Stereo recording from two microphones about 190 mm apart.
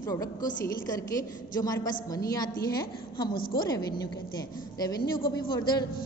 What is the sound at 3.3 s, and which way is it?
Speech, 50° left (ahead or behind).